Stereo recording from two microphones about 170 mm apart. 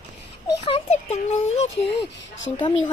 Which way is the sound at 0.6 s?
40° left (ahead or behind).